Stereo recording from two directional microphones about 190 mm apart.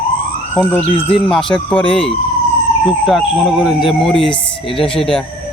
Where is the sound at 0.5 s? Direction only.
5° left (ahead or behind).